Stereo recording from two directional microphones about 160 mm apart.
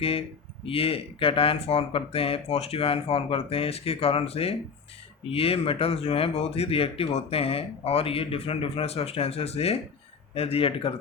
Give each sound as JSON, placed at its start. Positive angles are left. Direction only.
{"t": 0.0, "sound": "speech", "side_deg": 35}